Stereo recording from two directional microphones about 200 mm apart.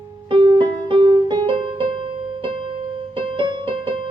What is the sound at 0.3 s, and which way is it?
Music, 25° right (ahead or behind).